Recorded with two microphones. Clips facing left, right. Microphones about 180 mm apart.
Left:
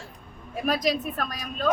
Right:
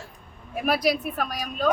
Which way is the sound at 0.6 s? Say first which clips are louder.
Right 2 dB; 10° right (ahead or behind).